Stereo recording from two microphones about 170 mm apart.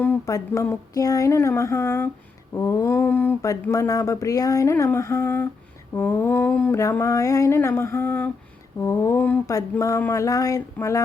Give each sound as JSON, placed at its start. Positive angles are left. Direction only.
{"t": 0.0, "sound": "speech", "side_deg": 15}